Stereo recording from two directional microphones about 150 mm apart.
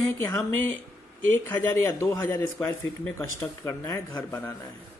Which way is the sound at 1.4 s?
15° left (ahead or behind).